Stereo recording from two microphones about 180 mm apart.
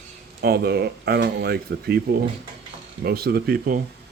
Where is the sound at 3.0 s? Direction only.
60° right (ahead or behind).